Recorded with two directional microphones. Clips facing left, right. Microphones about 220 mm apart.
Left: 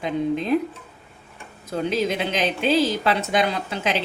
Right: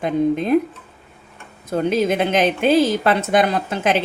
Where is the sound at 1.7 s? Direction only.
50° right (ahead or behind).